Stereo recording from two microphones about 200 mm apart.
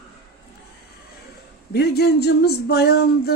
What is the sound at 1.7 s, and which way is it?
Speech, 55° left (ahead or behind).